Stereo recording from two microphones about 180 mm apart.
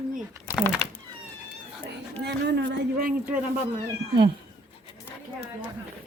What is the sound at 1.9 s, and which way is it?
Speech, 70° right (ahead or behind).